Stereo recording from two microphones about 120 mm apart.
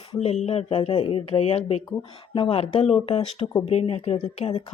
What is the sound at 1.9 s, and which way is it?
Speech, 40° left (ahead or behind).